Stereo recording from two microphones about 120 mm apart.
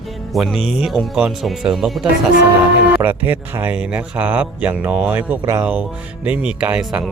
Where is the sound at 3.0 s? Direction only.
15° right (ahead or behind).